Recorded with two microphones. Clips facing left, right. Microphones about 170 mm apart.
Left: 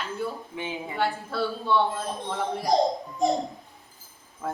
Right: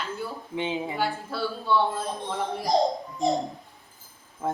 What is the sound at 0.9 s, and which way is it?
Speech, centre (ahead or behind).